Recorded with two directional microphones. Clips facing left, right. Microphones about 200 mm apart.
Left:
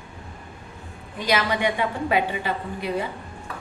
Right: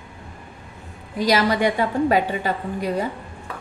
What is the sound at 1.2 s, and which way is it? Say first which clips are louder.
A woman's voice: right 4 dB; 40° right (ahead or behind).